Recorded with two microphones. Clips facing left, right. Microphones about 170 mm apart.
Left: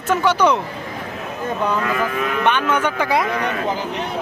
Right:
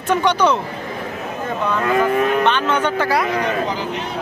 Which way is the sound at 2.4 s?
10° left (ahead or behind).